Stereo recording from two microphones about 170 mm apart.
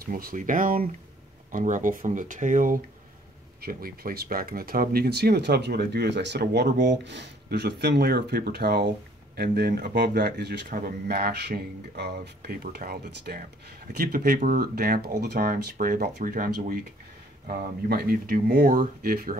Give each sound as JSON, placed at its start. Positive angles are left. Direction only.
{"t": 0.0, "sound": "speech", "side_deg": -55}
{"t": 10.7, "sound": "speech", "side_deg": -65}